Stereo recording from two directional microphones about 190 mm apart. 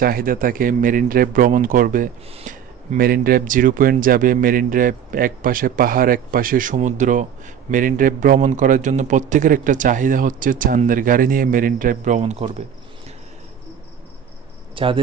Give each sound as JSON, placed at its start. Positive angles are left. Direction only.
{"t": 0.0, "sound": "speech", "side_deg": -50}
{"t": 14.8, "sound": "speech", "side_deg": -25}